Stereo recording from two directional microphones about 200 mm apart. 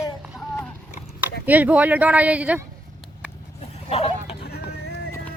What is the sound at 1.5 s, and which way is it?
Speech, 10° right (ahead or behind).